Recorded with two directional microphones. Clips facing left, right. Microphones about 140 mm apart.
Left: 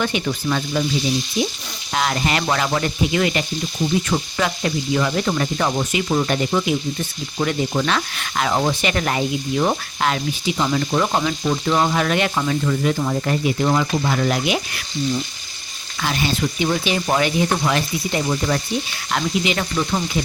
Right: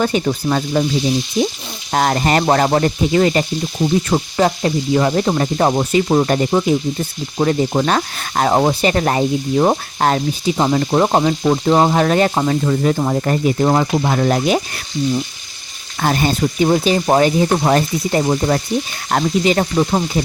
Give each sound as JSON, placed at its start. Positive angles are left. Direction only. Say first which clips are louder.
{"t": 0.0, "sound": "speech", "louder": "right 5 dB", "side_deg": -40}
{"t": 1.9, "sound": "speech", "louder": "right 6 dB", "side_deg": -45}
{"t": 16.0, "sound": "speech", "louder": "right 5 dB", "side_deg": -45}